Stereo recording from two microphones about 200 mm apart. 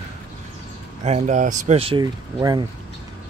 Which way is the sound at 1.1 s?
35° right (ahead or behind).